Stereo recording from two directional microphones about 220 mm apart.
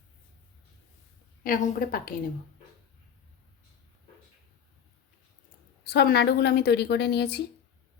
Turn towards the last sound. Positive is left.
turn(degrees=50)  # may be behind; listen again after turning